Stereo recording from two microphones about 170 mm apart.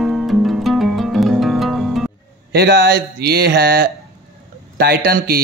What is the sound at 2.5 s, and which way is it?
Speech, 65° right (ahead or behind).